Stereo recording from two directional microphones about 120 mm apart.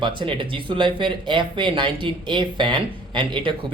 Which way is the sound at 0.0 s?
45° right (ahead or behind).